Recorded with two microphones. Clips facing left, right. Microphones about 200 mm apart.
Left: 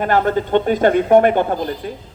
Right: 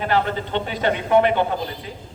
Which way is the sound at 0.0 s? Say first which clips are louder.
Left 5 dB; 50° left (ahead or behind).